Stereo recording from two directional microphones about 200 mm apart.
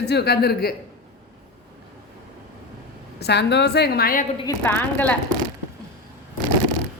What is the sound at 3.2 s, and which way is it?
A woman's voice, 55° left (ahead or behind).